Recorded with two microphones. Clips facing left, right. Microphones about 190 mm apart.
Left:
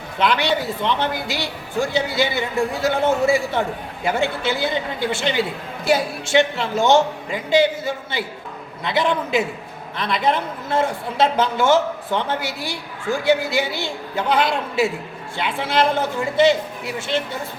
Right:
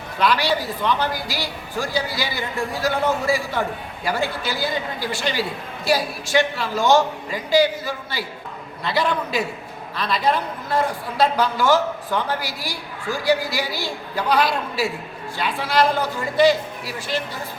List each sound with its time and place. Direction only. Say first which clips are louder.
0.2 s speech: left 1 dB; 25° left (ahead or behind)